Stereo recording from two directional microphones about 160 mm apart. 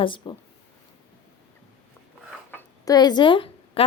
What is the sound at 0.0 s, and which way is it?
Speech, 30° left (ahead or behind).